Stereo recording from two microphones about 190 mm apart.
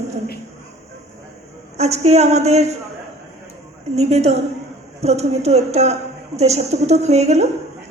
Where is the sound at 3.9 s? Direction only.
35° right (ahead or behind).